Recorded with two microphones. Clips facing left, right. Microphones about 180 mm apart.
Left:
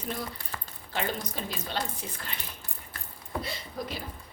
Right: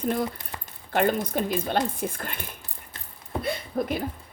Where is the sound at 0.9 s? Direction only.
55° right (ahead or behind).